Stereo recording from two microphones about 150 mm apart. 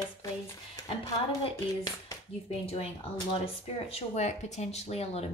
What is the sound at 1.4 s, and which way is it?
Speech, 30° left (ahead or behind).